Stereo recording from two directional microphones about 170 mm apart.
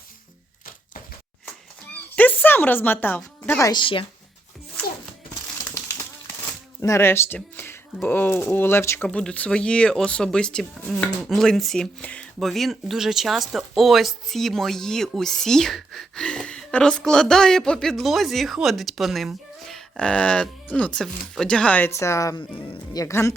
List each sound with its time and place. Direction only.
2.1 s speech: 10° left (ahead or behind)
3.7 s speech: 30° left (ahead or behind)
6.8 s speech: 15° left (ahead or behind)
22.5 s speech: 30° left (ahead or behind)
23.0 s speech: 15° left (ahead or behind)